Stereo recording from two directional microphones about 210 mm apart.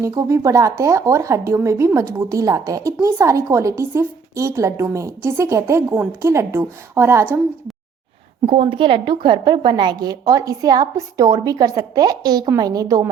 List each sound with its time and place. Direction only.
0.0 s speech: 15° right (ahead or behind)
8.4 s a woman's voice: 25° right (ahead or behind)